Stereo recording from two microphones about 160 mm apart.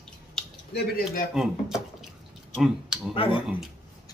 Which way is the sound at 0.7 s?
70° left (ahead or behind).